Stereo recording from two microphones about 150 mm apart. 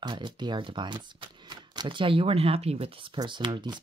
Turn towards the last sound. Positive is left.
turn(degrees=-30)  # may be behind; listen again after turning